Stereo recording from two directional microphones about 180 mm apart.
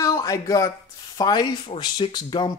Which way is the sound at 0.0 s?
20° left (ahead or behind).